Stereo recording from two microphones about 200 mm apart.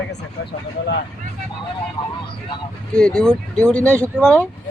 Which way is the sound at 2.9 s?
5° left (ahead or behind).